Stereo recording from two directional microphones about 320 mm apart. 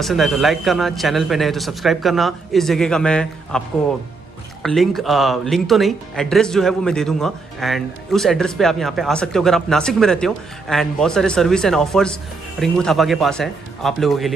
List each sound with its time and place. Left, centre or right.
0.0 s speech: centre
4.6 s speech: centre